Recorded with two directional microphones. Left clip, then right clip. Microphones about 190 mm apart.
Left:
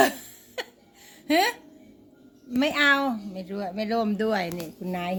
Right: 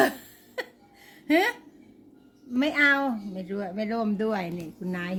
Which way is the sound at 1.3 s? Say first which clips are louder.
Left 1 dB; 15° right (ahead or behind).